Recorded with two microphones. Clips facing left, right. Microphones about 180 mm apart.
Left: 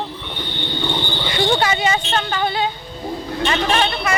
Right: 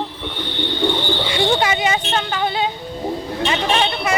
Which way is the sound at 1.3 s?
15° right (ahead or behind).